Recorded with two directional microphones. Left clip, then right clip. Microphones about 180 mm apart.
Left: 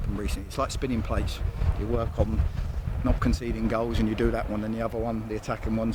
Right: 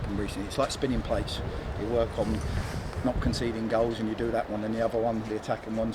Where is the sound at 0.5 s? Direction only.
50° left (ahead or behind).